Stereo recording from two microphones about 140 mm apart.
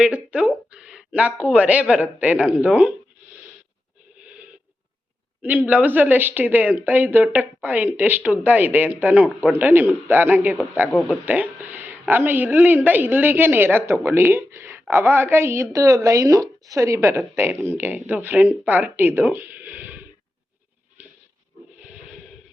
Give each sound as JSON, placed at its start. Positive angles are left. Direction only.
{"t": 0.0, "sound": "a woman's voice", "side_deg": -10}
{"t": 5.4, "sound": "a woman's voice", "side_deg": -10}
{"t": 10.9, "sound": "speech", "side_deg": 0}
{"t": 11.3, "sound": "a woman's voice", "side_deg": -15}